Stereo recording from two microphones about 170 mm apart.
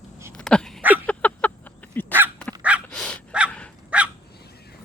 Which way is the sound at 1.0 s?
10° left (ahead or behind).